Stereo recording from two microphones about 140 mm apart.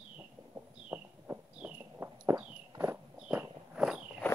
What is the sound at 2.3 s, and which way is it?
Walk, 15° right (ahead or behind).